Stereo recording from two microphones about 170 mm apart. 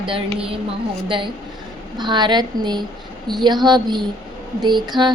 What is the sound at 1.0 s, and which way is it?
A woman's voice, 30° right (ahead or behind).